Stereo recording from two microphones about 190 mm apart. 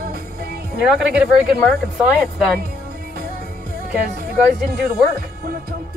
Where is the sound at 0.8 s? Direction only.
5° right (ahead or behind).